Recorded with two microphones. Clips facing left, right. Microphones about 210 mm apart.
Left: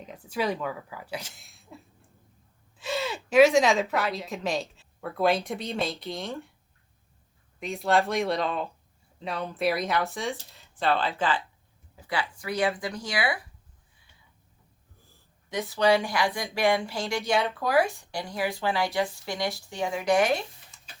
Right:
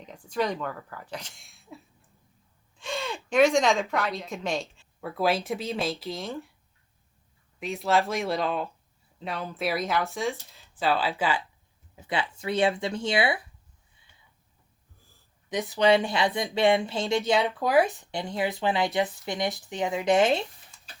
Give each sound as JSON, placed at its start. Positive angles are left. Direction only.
{"t": 0.0, "sound": "speech", "side_deg": 5}
{"t": 7.6, "sound": "speech", "side_deg": 0}
{"t": 11.9, "sound": "speech", "side_deg": -25}
{"t": 15.4, "sound": "speech", "side_deg": -20}